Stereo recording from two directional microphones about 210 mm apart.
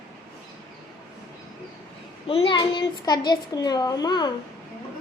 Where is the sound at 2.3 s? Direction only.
25° left (ahead or behind).